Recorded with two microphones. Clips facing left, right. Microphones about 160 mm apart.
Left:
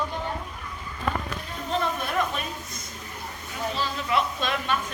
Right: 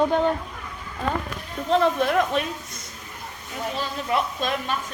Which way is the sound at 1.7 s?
75° right (ahead or behind).